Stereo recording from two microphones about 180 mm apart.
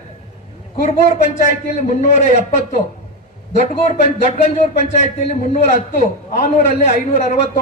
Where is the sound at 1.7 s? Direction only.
40° left (ahead or behind).